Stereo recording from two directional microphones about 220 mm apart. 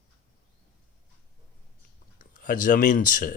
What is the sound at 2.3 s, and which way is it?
Speech, 35° left (ahead or behind).